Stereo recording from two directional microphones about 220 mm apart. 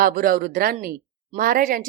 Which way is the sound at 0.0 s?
40° right (ahead or behind).